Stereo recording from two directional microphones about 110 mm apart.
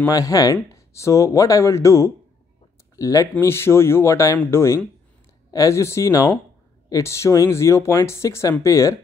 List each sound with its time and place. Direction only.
0.0 s speech: 30° left (ahead or behind)